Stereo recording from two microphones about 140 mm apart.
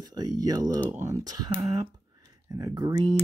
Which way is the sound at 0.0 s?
30° right (ahead or behind).